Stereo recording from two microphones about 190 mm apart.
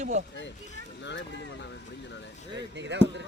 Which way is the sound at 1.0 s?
70° left (ahead or behind).